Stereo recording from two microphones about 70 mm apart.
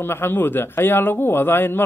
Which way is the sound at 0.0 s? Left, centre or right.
Left.